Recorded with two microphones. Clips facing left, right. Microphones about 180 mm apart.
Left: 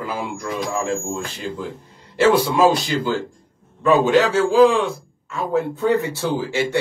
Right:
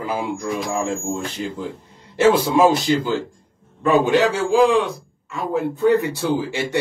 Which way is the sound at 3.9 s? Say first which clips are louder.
Left 1 dB; 15° right (ahead or behind).